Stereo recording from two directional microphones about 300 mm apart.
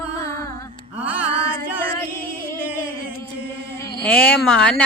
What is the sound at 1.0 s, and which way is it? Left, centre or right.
Music, centre.